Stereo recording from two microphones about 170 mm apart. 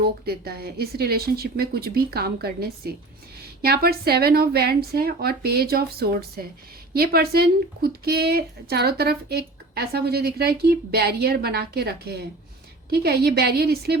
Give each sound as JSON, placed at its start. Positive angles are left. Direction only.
{"t": 0.0, "sound": "speech", "side_deg": -70}